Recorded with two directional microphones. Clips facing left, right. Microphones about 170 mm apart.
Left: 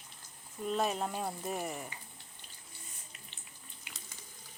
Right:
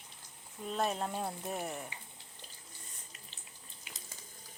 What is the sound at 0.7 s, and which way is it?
Speech, centre (ahead or behind).